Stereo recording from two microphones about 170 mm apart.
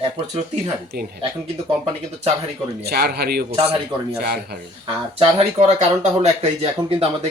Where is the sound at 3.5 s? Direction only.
35° right (ahead or behind).